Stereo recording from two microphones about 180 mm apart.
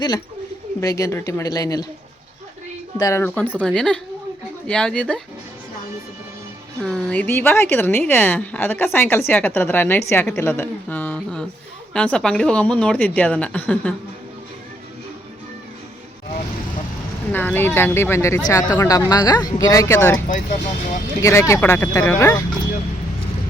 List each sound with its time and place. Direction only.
0.8 s a woman's voice: 20° left (ahead or behind)
3.0 s a woman's voice: 15° left (ahead or behind)
6.8 s a woman's voice: 5° left (ahead or behind)
10.1 s a sound: 10° left (ahead or behind)
11.9 s a woman's voice: 5° left (ahead or behind)
17.3 s a woman's voice: 10° left (ahead or behind)
20.2 s speech: 45° left (ahead or behind)
21.2 s a woman's voice: 15° left (ahead or behind)